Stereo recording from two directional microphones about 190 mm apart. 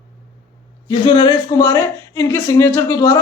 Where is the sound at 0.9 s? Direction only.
25° left (ahead or behind).